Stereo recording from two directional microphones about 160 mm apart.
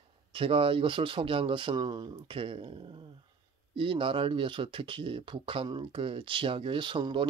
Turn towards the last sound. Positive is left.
turn(degrees=-30)  # may be behind; listen again after turning